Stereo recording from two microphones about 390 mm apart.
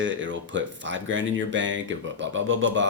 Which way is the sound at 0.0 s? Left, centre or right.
Right.